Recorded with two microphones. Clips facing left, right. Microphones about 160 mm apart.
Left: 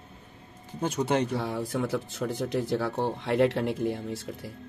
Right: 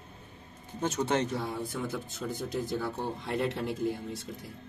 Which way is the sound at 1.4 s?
80° left.